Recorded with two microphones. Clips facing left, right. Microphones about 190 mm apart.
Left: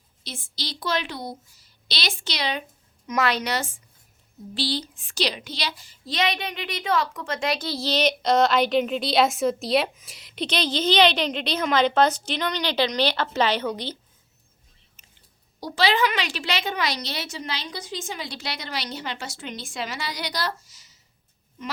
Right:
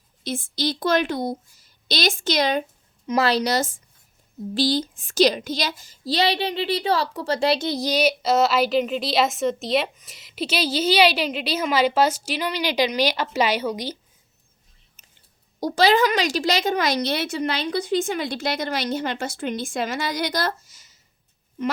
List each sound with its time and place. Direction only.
0.3 s a woman's voice: 50° right (ahead or behind)
3.1 s speech: 35° right (ahead or behind)
7.6 s a woman's voice: 15° right (ahead or behind)
15.6 s a woman's voice: 45° right (ahead or behind)